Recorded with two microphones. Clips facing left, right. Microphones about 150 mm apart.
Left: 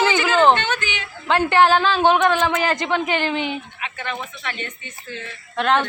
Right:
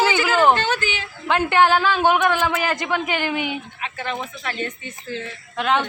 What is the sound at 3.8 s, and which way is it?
Speech, 35° right (ahead or behind).